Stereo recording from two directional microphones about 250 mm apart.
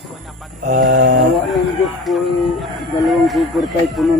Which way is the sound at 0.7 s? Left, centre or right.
Right.